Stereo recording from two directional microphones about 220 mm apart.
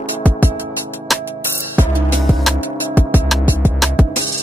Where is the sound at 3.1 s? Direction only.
10° right (ahead or behind).